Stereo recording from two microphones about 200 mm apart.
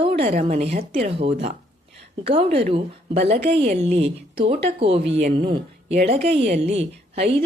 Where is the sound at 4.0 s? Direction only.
60° right (ahead or behind).